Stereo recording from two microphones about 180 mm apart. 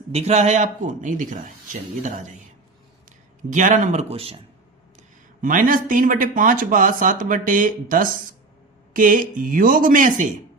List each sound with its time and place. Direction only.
0.1 s speech: 35° right (ahead or behind)
3.5 s speech: 45° right (ahead or behind)
5.4 s speech: 45° right (ahead or behind)